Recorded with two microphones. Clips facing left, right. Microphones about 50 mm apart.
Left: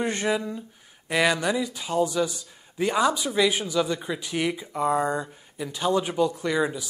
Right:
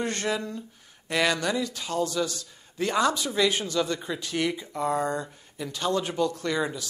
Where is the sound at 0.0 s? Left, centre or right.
Centre.